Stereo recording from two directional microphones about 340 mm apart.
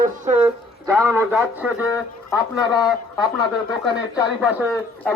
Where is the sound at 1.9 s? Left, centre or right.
Centre.